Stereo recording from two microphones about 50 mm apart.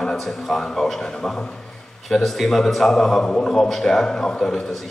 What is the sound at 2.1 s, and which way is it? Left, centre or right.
A man's voice, centre.